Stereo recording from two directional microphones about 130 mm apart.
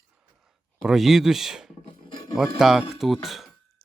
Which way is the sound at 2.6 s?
5° right (ahead or behind).